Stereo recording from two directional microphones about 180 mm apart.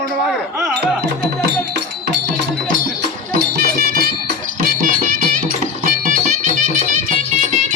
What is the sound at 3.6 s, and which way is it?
Music, 55° right (ahead or behind).